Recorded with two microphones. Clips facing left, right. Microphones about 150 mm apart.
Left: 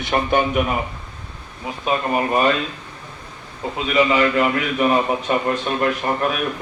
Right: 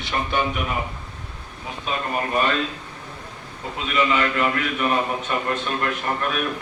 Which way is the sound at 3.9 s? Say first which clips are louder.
Left 5 dB; 35° left (ahead or behind).